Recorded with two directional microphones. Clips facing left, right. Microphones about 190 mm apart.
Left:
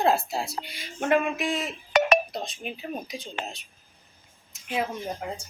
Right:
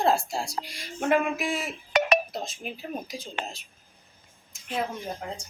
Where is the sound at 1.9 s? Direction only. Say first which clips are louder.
Left 2 dB; 45° left (ahead or behind).